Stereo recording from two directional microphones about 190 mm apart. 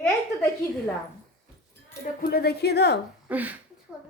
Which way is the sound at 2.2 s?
55° left (ahead or behind).